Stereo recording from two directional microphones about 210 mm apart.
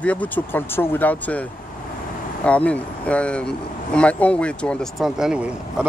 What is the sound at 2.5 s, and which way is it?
Speech, 5° left (ahead or behind).